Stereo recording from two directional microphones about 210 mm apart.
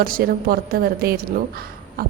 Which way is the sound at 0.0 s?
45° right (ahead or behind).